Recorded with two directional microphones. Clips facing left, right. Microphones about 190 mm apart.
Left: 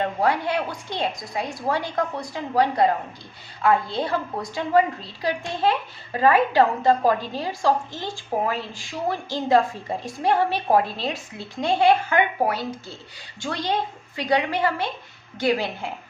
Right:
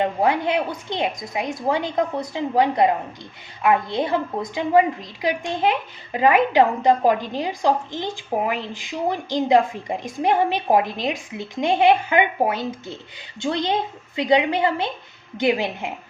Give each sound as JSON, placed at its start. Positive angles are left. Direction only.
{"t": 0.0, "sound": "a woman's voice", "side_deg": -20}